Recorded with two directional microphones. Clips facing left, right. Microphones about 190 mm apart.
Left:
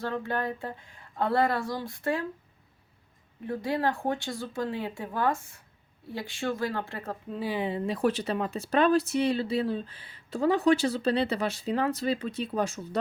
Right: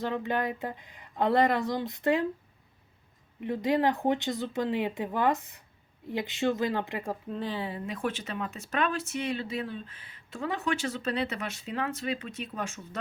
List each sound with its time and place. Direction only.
0.0 s speech: 15° right (ahead or behind)
3.4 s speech: 20° right (ahead or behind)
7.3 s speech: 5° left (ahead or behind)
7.9 s speech: 35° left (ahead or behind)